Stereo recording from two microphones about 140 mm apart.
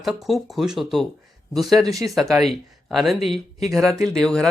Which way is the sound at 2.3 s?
Centre (ahead or behind).